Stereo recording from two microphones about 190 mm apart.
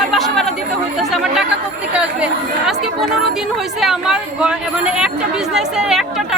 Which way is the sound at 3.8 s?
Centre (ahead or behind).